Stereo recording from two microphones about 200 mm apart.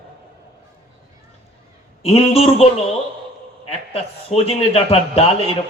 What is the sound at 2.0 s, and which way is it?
A man's voice, 30° left (ahead or behind).